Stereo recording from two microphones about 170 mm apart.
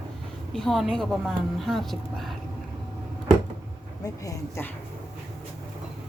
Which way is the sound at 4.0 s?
15° left (ahead or behind).